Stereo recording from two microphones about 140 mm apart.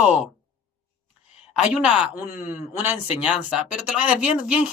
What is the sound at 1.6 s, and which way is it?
Speech, 10° right (ahead or behind).